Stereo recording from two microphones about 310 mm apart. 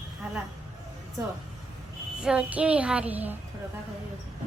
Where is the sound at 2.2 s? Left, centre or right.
Centre.